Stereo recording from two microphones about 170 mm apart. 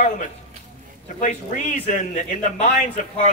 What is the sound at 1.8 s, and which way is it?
A man's voice, 45° left (ahead or behind).